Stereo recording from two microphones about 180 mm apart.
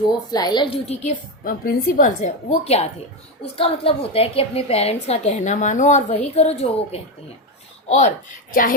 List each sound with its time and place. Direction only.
0.3 s a woman's voice: 20° left (ahead or behind)
1.5 s a woman's voice: 50° left (ahead or behind)